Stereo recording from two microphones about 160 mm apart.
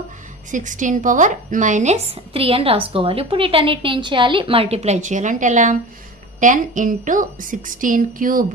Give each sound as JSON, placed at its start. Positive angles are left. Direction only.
{"t": 0.5, "sound": "a woman's voice", "side_deg": -50}